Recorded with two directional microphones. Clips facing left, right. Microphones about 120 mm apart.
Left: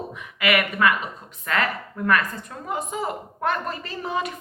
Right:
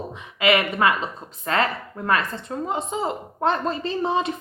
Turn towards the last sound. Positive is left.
turn(degrees=-25)  # may be behind; listen again after turning